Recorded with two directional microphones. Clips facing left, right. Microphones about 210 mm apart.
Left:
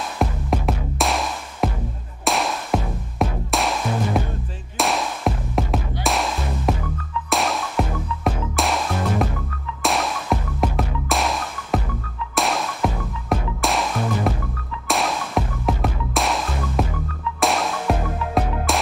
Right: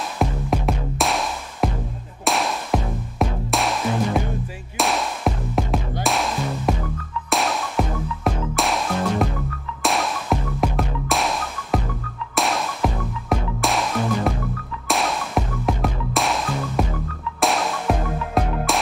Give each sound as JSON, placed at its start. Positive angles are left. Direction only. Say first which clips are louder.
{"t": 0.2, "sound": "music", "louder": "right 1 dB", "side_deg": 0}